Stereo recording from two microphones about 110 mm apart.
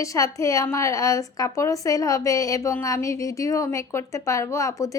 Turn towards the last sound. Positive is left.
turn(degrees=30)  # may be behind; listen again after turning